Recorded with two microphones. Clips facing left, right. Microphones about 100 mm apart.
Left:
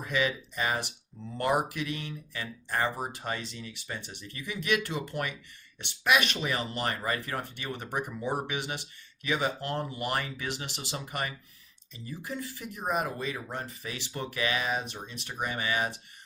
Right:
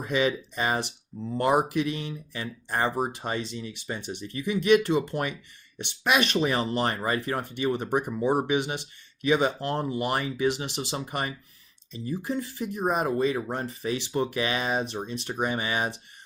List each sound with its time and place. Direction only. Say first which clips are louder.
0.0 s speech: right 4 dB; 25° right (ahead or behind)